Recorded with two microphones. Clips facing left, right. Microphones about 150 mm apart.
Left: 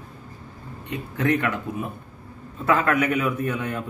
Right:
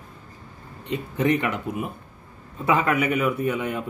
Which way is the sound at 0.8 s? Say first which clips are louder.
Right 2 dB; 20° right (ahead or behind).